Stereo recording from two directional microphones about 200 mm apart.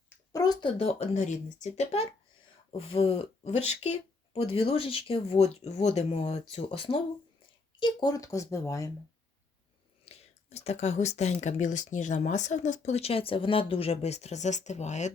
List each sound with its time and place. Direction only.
0.3 s a woman's voice: 20° left (ahead or behind)
10.1 s speech: 30° left (ahead or behind)